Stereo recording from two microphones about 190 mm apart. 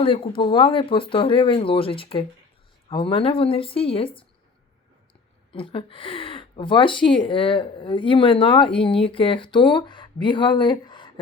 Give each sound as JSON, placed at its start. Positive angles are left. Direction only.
{"t": 0.0, "sound": "speech", "side_deg": 25}
{"t": 5.5, "sound": "speech", "side_deg": 30}